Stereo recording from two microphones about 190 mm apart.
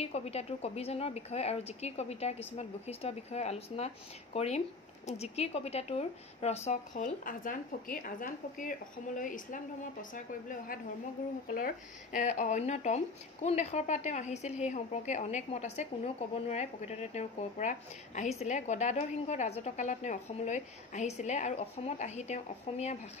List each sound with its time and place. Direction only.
0.0 s a woman's voice: 35° left (ahead or behind)